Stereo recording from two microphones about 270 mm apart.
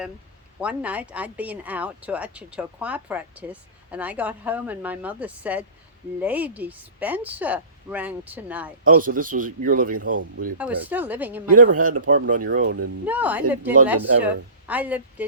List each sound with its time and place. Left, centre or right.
0.6 s speech: centre
8.8 s a man's voice: right
10.6 s speech: centre
11.5 s a man's voice: right
13.1 s speech: centre